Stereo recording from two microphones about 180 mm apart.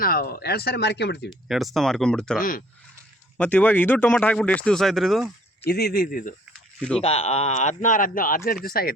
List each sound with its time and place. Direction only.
0.0 s speech: 55° left (ahead or behind)
1.3 s speech: centre (ahead or behind)
2.4 s speech: 50° left (ahead or behind)
3.3 s speech: 10° left (ahead or behind)
5.6 s speech: 60° left (ahead or behind)
6.7 s speech: 5° left (ahead or behind)
7.0 s speech: 35° left (ahead or behind); by 8.9 s 55° left (ahead or behind)